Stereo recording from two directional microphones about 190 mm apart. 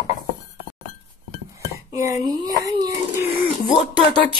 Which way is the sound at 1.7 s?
15° right (ahead or behind).